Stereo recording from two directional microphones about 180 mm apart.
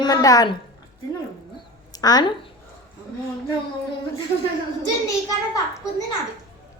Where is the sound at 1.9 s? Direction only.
20° left (ahead or behind).